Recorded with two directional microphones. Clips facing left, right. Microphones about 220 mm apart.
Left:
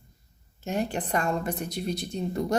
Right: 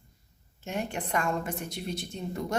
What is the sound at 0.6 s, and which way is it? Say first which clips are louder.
Speech: left 4 dB; 35° left (ahead or behind).